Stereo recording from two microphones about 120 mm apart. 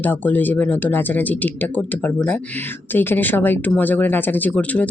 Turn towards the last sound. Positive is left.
turn(degrees=10)  # may be behind; listen again after turning